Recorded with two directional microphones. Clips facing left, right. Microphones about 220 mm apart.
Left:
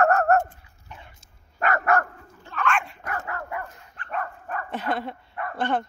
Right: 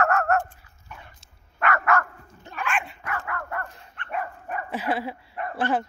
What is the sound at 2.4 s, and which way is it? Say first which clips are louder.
Dog: left 3 dB; 10° right (ahead or behind).